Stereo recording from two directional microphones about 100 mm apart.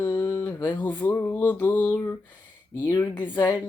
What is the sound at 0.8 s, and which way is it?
Music, 20° left (ahead or behind).